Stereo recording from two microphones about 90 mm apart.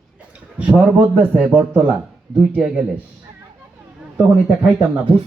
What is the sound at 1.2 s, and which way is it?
Speech, 20° right (ahead or behind).